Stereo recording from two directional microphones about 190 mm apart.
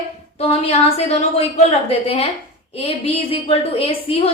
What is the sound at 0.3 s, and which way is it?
A woman's voice, 30° left (ahead or behind).